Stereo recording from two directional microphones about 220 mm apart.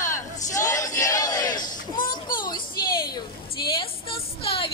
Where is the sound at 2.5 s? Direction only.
20° left (ahead or behind).